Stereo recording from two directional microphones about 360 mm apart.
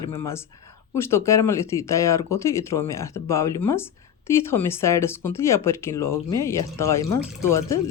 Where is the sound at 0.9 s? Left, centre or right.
Centre.